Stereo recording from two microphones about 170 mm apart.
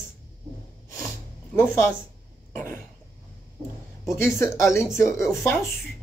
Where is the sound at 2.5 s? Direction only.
15° left (ahead or behind).